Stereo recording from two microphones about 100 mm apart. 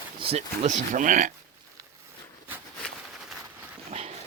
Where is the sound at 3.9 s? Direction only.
90° right.